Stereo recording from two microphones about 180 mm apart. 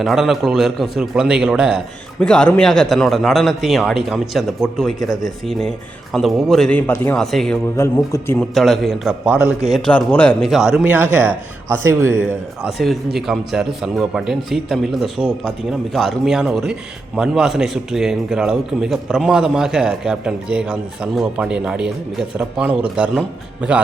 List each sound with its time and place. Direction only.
0.0 s a man's voice: centre (ahead or behind)
7.8 s a man's voice: 15° left (ahead or behind)
8.5 s a man's voice: centre (ahead or behind)
9.6 s a man's voice: centre (ahead or behind); by 12.2 s 15° right (ahead or behind)
12.6 s a man's voice: centre (ahead or behind)